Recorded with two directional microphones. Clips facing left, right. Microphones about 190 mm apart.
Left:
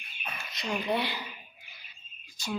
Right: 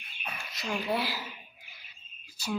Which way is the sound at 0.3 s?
5° right (ahead or behind).